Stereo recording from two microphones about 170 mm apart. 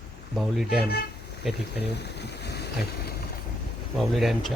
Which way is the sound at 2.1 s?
80° left.